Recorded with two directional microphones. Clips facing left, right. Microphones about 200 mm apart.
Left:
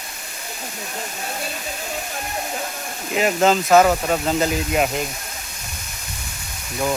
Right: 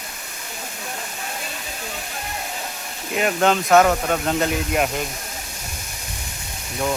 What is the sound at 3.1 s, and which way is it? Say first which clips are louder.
Speech: left 2 dB; 5° left (ahead or behind).